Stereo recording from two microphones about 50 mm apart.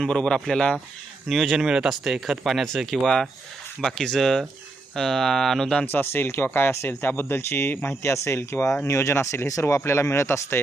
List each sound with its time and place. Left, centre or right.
0.1 s speech: centre
5.8 s speech: left
7.9 s speech: left
9.5 s speech: left